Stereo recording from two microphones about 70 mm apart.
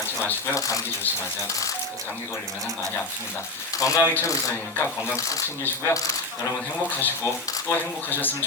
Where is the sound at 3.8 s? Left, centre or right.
Left.